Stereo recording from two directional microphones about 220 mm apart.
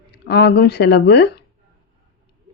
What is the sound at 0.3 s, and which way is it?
Speech, 45° left (ahead or behind).